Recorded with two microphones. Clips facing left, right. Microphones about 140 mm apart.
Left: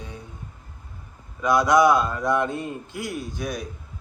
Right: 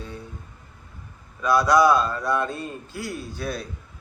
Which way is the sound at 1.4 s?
20° left (ahead or behind).